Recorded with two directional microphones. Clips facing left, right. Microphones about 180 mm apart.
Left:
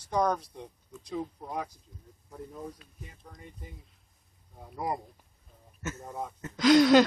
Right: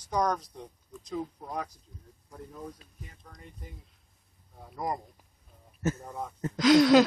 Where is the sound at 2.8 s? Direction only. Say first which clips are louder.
Even; 35° right (ahead or behind).